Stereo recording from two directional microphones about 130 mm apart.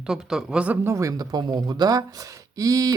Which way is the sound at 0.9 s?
25° right (ahead or behind).